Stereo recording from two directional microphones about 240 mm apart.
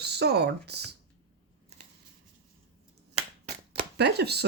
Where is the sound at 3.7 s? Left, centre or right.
Right.